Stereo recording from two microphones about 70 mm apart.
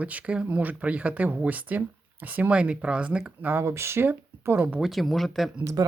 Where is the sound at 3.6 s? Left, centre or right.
Right.